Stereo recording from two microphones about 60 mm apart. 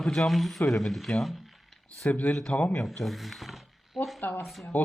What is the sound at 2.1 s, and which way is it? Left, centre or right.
Speech, left.